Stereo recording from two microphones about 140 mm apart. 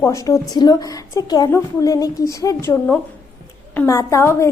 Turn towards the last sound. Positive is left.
turn(degrees=20)  # may be behind; listen again after turning